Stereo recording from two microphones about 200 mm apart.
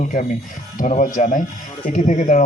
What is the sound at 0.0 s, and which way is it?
A man's voice, 40° left (ahead or behind).